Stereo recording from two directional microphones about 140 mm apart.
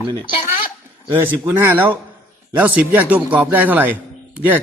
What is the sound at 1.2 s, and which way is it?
Speech, 15° right (ahead or behind).